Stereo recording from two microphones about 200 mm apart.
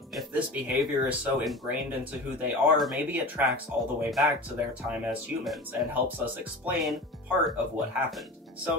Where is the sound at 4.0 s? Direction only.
Centre (ahead or behind).